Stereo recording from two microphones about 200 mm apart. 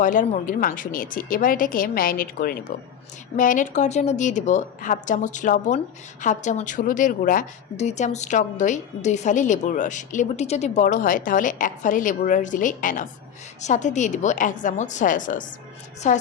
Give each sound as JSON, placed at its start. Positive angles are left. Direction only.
{"t": 0.0, "sound": "a woman's voice", "side_deg": 40}